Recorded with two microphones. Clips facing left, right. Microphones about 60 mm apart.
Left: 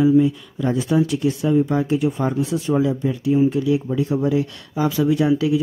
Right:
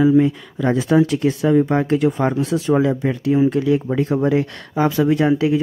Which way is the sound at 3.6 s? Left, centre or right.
Right.